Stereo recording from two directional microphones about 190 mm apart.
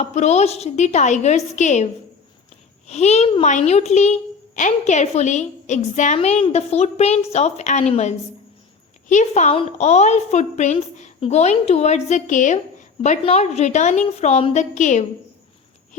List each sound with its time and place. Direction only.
0.0 s a woman's voice: 35° left (ahead or behind)